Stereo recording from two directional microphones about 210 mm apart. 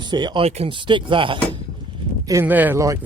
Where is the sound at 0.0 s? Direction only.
20° right (ahead or behind).